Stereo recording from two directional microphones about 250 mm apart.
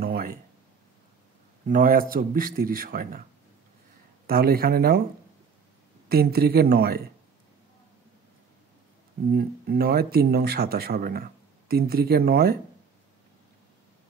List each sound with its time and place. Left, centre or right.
0.0 s a sound: right
1.7 s speech: right
4.3 s speech: right
6.0 s speech: right
9.3 s speech: right